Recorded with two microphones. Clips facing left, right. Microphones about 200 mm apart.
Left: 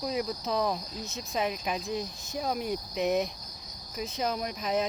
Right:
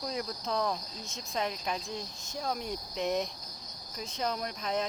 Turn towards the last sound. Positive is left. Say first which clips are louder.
# left 3 dB
turn(degrees=10)  # may be behind; listen again after turning